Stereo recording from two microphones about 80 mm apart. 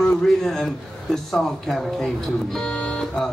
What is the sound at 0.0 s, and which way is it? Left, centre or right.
A man's voice, centre.